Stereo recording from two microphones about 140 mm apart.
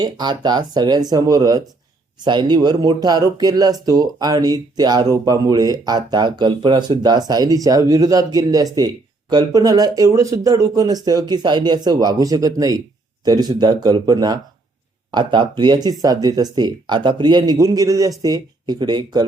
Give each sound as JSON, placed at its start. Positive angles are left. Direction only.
{"t": 0.0, "sound": "speech", "side_deg": -30}